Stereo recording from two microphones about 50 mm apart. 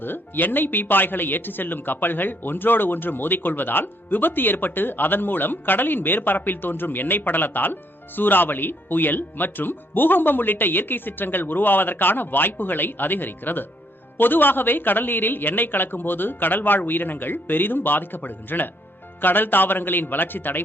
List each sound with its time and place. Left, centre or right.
0.0 s speech: left